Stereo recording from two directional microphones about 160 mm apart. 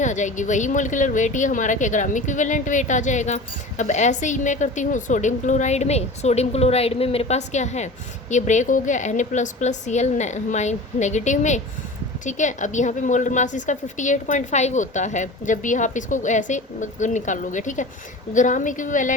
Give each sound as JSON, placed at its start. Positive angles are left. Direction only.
{"t": 0.0, "sound": "speech", "side_deg": 50}